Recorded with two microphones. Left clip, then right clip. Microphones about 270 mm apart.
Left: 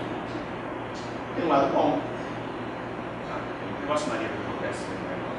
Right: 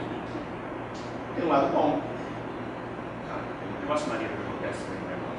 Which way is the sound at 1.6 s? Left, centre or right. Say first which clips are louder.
Left 1 dB; centre.